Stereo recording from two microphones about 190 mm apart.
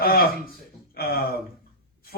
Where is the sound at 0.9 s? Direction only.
50° left (ahead or behind).